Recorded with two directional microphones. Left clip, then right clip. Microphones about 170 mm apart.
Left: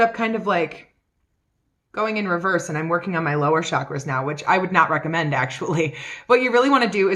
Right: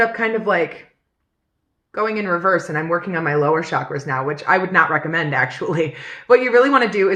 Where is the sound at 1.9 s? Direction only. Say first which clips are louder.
Right 2 dB; 50° left (ahead or behind).